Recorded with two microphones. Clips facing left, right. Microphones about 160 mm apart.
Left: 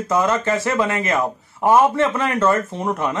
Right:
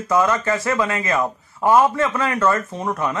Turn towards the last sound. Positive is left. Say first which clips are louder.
# left 1 dB
turn(degrees=25)  # may be behind; listen again after turning